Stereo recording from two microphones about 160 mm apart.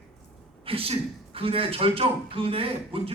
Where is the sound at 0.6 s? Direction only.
35° right (ahead or behind).